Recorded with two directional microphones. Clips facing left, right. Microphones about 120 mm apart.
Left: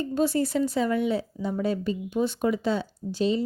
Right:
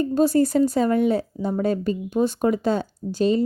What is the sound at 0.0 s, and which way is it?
Speech, 40° right (ahead or behind).